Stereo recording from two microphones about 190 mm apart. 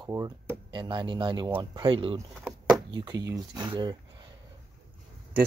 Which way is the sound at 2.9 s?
20° right (ahead or behind).